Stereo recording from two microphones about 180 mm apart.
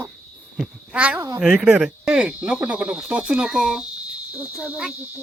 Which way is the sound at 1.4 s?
5° right (ahead or behind).